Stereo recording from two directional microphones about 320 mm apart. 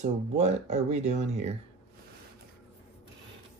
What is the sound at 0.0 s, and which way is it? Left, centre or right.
Speech, right.